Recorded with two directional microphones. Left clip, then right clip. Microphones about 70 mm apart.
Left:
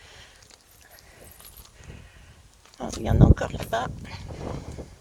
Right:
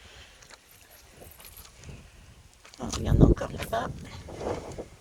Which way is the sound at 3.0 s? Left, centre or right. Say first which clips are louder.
Left 1 dB; centre.